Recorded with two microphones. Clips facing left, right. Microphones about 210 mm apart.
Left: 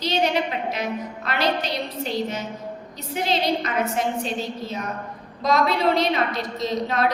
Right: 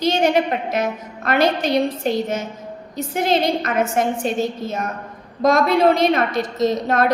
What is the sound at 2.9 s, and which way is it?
A woman's voice, 50° right (ahead or behind).